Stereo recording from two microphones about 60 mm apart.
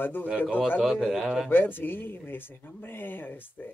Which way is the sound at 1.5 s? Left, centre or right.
Left.